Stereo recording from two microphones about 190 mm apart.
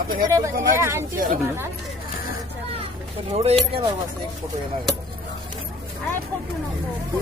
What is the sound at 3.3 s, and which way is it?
Speech, 30° right (ahead or behind).